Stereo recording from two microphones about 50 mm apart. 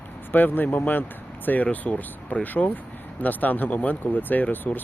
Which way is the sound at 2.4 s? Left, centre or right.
Left.